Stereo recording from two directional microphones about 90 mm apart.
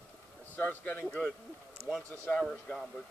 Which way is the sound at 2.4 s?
5° left (ahead or behind).